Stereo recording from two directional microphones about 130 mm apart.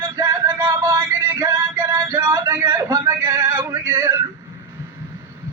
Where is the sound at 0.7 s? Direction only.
20° right (ahead or behind).